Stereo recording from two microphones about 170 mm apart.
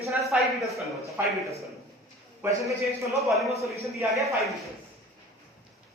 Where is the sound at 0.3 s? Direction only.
5° right (ahead or behind).